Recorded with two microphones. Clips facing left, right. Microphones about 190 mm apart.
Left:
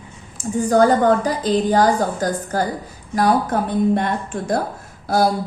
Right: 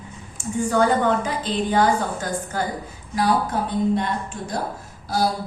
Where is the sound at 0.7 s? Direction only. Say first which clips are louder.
Left 5 dB; 40° left (ahead or behind).